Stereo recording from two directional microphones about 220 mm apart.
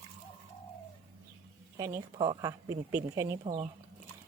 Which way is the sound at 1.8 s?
15° right (ahead or behind).